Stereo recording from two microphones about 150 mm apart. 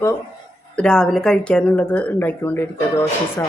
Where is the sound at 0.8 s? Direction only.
5° left (ahead or behind).